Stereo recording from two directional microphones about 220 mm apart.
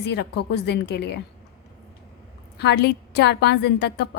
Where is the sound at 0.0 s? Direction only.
50° left (ahead or behind).